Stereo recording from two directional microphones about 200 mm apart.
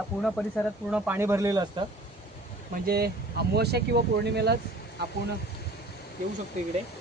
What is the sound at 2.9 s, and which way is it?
Speech, 50° right (ahead or behind).